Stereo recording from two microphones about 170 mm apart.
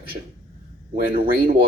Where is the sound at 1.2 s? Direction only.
55° right (ahead or behind).